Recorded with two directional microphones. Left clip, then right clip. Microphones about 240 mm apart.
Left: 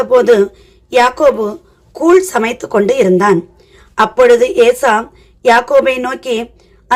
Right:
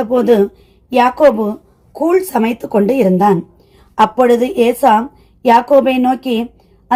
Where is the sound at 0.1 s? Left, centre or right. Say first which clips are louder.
Left 3 dB; centre.